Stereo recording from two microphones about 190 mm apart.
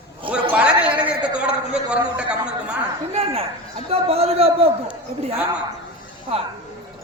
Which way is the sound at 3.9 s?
30° right (ahead or behind).